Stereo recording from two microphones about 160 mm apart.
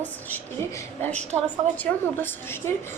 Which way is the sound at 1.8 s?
15° left (ahead or behind).